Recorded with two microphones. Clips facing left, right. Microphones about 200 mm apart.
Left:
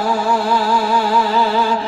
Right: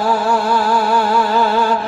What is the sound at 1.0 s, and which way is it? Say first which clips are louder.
Music: right 1 dB; 50° right (ahead or behind).